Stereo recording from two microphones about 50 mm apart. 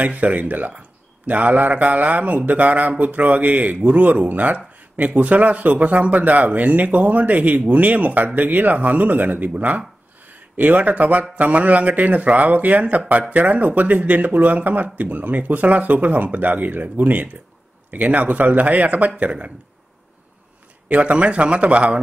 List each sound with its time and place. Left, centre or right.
0.0 s a man's voice: right
20.9 s a man's voice: right